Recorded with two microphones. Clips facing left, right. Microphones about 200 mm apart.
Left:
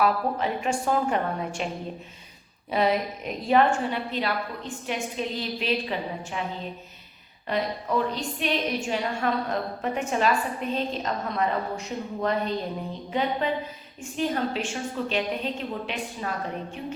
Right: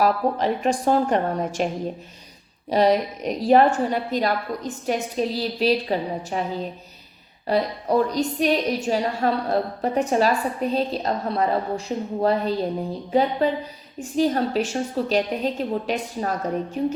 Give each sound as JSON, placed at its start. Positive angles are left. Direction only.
{"t": 0.0, "sound": "a woman's voice", "side_deg": -35}
{"t": 2.6, "sound": "a woman's voice", "side_deg": -35}
{"t": 7.4, "sound": "a woman's voice", "side_deg": -35}